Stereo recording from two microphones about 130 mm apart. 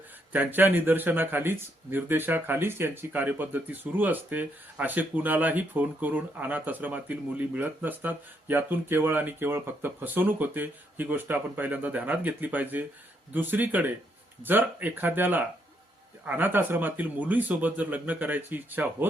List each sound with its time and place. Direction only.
0.3 s speech: 15° right (ahead or behind)